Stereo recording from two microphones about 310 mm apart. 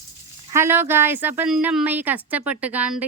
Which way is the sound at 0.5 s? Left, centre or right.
Centre.